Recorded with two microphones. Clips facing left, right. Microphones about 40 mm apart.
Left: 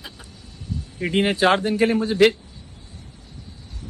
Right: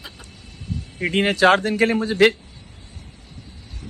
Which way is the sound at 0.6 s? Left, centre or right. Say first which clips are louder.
Right 2 dB; right.